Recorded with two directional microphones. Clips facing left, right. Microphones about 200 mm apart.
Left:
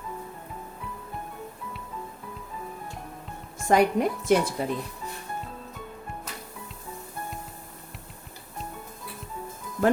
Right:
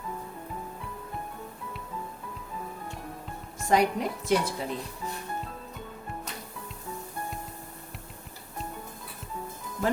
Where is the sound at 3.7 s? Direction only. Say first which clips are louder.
Left 3 dB; 55° left (ahead or behind).